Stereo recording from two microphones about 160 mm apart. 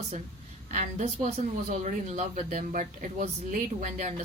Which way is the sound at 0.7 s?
50° right (ahead or behind).